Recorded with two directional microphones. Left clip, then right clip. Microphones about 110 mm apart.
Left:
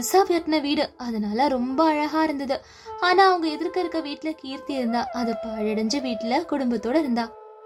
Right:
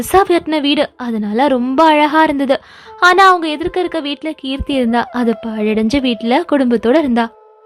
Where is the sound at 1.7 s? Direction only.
45° right (ahead or behind).